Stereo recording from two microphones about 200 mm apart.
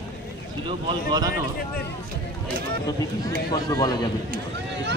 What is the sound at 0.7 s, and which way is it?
Speech, 20° right (ahead or behind).